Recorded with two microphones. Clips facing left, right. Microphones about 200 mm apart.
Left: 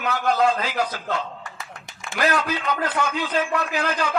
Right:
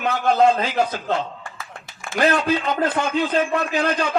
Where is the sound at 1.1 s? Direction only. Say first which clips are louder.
Right 4 dB; 30° right (ahead or behind).